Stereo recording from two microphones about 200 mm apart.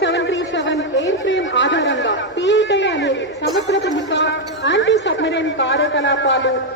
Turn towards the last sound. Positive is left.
turn(degrees=70)  # may be behind; listen again after turning